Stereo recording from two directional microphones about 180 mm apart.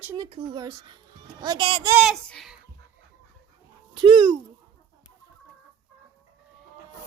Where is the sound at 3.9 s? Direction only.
30° right (ahead or behind).